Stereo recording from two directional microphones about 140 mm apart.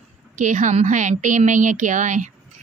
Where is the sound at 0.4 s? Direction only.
65° right (ahead or behind).